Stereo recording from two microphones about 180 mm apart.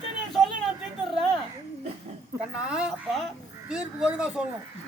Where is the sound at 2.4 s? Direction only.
5° right (ahead or behind).